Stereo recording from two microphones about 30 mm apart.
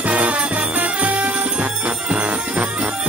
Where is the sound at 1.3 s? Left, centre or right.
Right.